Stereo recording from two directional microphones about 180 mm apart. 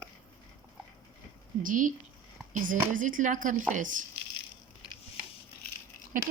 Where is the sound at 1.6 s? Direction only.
45° right (ahead or behind).